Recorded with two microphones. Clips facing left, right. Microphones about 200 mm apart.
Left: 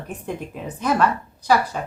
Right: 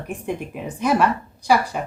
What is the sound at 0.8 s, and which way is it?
Speech, 10° right (ahead or behind).